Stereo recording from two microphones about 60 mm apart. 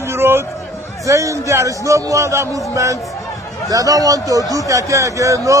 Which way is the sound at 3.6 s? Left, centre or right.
Right.